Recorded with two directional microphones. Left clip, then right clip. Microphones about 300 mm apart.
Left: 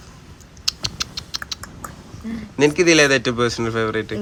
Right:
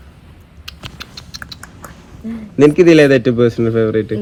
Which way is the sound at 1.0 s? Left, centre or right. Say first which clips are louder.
Left 3 dB; centre.